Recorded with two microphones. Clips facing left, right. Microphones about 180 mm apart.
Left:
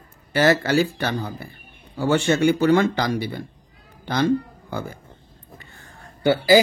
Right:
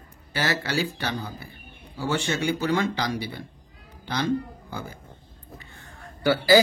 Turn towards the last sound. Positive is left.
turn(degrees=20)  # may be behind; listen again after turning